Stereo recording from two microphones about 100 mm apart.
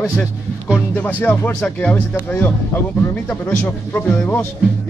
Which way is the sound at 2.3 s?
20° left (ahead or behind).